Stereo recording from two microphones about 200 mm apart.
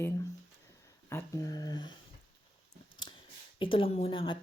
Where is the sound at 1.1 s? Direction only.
15° left (ahead or behind).